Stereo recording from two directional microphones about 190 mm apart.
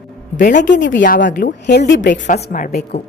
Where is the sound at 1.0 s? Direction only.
45° left (ahead or behind).